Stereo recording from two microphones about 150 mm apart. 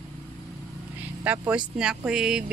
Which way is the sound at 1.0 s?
10° right (ahead or behind).